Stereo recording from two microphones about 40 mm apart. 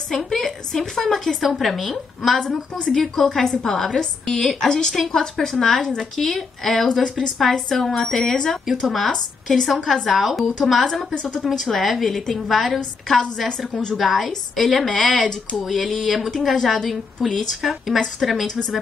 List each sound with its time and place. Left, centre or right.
0.1 s a woman's voice: centre
13.5 s a woman's voice: centre
13.9 s a woman's voice: centre
15.5 s a woman's voice: centre